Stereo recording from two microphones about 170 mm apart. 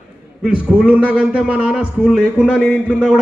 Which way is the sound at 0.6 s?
10° right (ahead or behind).